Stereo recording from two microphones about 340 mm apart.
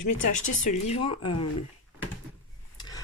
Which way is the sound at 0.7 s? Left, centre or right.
Centre.